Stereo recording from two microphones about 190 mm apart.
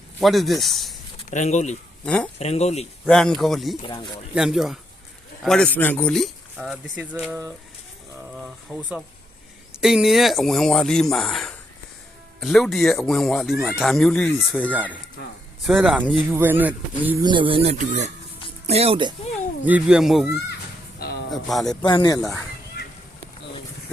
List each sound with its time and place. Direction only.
0.2 s speech: centre (ahead or behind)
1.3 s speech: 40° left (ahead or behind)
2.0 s speech: 5° left (ahead or behind)
2.4 s speech: 35° left (ahead or behind)
3.1 s speech: 5° left (ahead or behind)
3.8 s speech: 25° left (ahead or behind)
4.4 s speech: centre (ahead or behind)
14.7 s speech: 10° right (ahead or behind)
17.2 s speech: 25° right (ahead or behind)
19.6 s speech: 5° right (ahead or behind)
21.2 s speech: centre (ahead or behind)
21.8 s speech: 20° left (ahead or behind)